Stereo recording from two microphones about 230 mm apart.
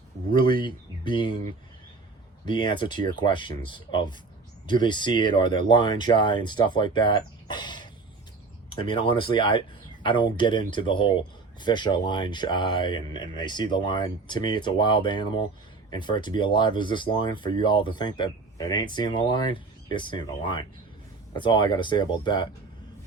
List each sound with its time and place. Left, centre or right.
0.3 s speech: left
2.5 s speech: left